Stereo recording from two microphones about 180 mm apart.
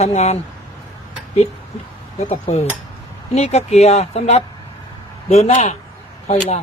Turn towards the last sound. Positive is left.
turn(degrees=35)  # may be behind; listen again after turning